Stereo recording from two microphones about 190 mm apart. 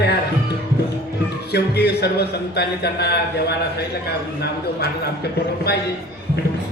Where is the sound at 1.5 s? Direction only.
60° left (ahead or behind).